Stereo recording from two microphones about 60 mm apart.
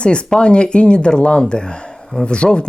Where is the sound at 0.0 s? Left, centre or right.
Centre.